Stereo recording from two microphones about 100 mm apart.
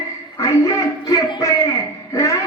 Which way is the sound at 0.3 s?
35° left (ahead or behind).